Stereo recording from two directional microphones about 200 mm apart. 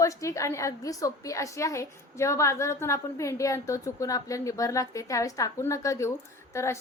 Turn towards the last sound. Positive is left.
turn(degrees=15)  # may be behind; listen again after turning